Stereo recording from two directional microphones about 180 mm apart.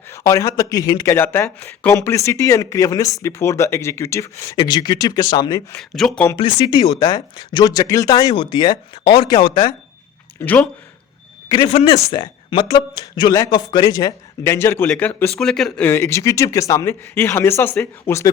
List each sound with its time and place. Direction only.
0.1 s a man's voice: 15° left (ahead or behind)
5.7 s speech: centre (ahead or behind)
6.3 s speech: 25° left (ahead or behind)
10.4 s a man's voice: 10° left (ahead or behind)
11.4 s a man's voice: 30° left (ahead or behind)